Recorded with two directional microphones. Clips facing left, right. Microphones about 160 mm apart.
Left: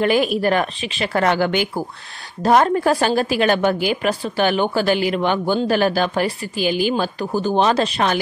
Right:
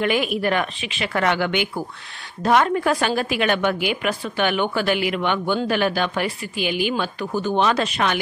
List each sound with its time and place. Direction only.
0.0 s a woman's voice: 35° left (ahead or behind)